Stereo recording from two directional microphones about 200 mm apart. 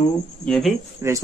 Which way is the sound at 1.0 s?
10° right (ahead or behind).